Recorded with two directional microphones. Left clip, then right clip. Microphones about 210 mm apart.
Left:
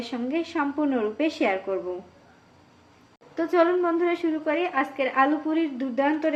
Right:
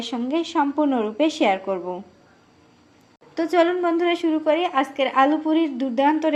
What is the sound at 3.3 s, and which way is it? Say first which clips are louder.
A woman's voice: right 2 dB; 45° right (ahead or behind).